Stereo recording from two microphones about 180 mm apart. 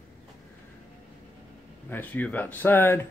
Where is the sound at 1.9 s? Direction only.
10° left (ahead or behind).